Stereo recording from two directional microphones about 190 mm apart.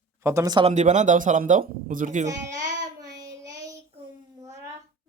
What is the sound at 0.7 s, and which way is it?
Speech, 40° right (ahead or behind).